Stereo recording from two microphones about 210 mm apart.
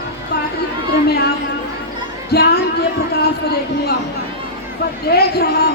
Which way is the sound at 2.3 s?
50° left (ahead or behind).